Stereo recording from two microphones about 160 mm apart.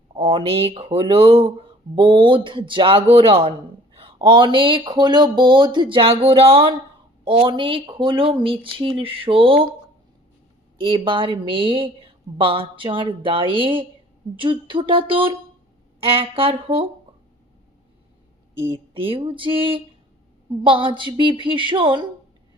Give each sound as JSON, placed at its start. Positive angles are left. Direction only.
{"t": 0.2, "sound": "a woman's voice", "side_deg": -35}
{"t": 10.8, "sound": "a woman's voice", "side_deg": -30}
{"t": 18.5, "sound": "a woman's voice", "side_deg": -15}
{"t": 18.9, "sound": "a woman's voice", "side_deg": -35}